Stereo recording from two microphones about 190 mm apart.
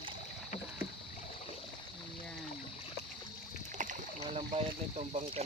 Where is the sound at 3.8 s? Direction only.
40° right (ahead or behind).